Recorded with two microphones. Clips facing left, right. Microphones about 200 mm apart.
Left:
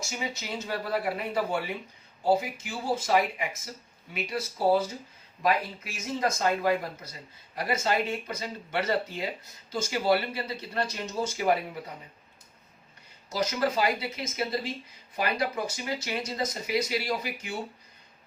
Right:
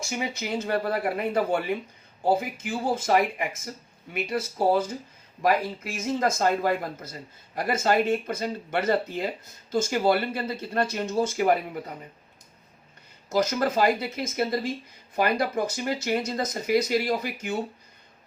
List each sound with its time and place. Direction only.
0.1 s speech: 55° right (ahead or behind)
13.3 s speech: 50° right (ahead or behind)